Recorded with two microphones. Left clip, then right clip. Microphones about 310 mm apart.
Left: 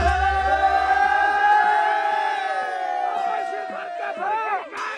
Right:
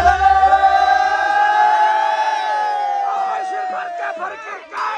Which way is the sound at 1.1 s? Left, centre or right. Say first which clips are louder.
Right 3 dB; centre.